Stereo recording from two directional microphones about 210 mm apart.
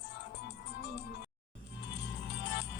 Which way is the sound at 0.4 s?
50° left (ahead or behind).